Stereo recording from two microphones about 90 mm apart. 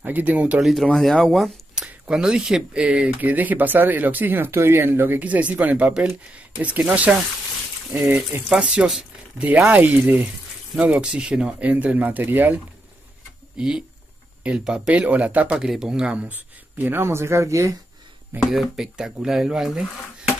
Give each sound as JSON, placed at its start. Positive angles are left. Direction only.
{"t": 0.0, "sound": "speech", "side_deg": -20}
{"t": 0.6, "sound": "speech", "side_deg": 0}
{"t": 1.9, "sound": "speech", "side_deg": -10}
{"t": 8.5, "sound": "speech", "side_deg": -10}
{"t": 13.6, "sound": "speech", "side_deg": -10}
{"t": 18.4, "sound": "speech", "side_deg": -5}